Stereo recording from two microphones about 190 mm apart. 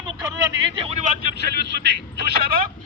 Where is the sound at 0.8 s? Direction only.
35° right (ahead or behind).